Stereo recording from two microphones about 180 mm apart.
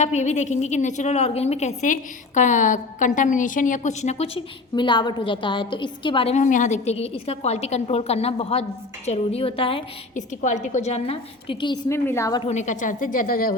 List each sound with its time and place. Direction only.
0.0 s a woman's voice: 40° left (ahead or behind)
4.7 s a woman's voice: 25° left (ahead or behind)
10.2 s a woman's voice: 40° left (ahead or behind); by 11.8 s 25° left (ahead or behind)
11.9 s a woman's voice: 15° left (ahead or behind)
12.5 s a woman's voice: 40° left (ahead or behind)